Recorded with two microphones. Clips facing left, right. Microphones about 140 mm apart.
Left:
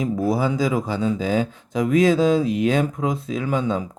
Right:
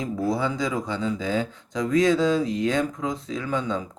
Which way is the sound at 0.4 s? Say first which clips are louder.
Left 5 dB; 20° left (ahead or behind).